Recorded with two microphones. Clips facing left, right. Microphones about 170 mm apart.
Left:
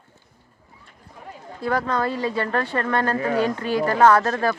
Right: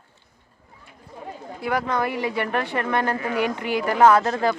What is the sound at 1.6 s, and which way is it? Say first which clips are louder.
Speech: left 1 dB; 15° right (ahead or behind).